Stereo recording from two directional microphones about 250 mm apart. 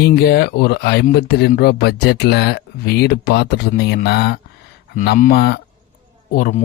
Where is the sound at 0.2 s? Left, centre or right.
Left.